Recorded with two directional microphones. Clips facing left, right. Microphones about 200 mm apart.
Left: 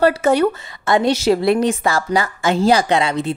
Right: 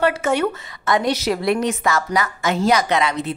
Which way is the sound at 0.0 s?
35° left (ahead or behind).